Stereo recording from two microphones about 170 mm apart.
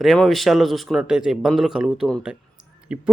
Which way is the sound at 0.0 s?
Centre (ahead or behind).